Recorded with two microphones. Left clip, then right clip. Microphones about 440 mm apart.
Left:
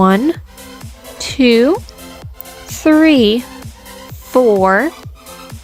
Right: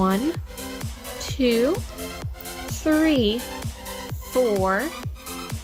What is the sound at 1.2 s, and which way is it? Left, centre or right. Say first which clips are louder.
Speech: left 10 dB; left.